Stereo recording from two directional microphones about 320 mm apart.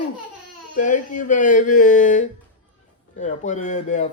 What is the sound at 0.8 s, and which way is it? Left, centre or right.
Speech, left.